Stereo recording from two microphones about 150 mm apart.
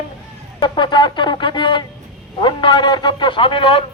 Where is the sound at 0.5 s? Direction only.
30° left (ahead or behind).